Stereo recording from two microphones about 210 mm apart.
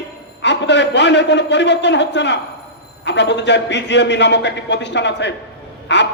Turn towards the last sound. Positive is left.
turn(degrees=55)  # may be behind; listen again after turning